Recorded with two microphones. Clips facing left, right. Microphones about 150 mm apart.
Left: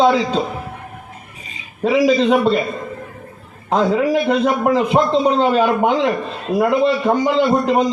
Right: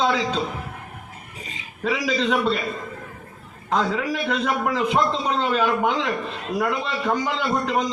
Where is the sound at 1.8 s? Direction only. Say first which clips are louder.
Left 9 dB; 45° left (ahead or behind).